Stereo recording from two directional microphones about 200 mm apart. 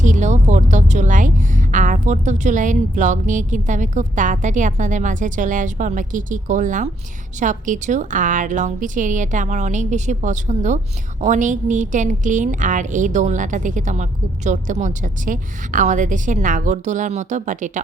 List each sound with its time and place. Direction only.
0.0 s a woman's voice: 35° right (ahead or behind)